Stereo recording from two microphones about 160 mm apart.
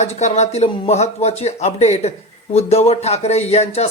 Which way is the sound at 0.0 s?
45° left (ahead or behind).